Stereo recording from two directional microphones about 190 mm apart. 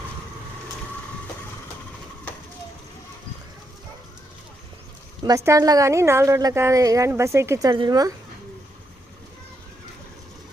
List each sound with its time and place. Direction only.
5.2 s a woman's voice: 15° right (ahead or behind)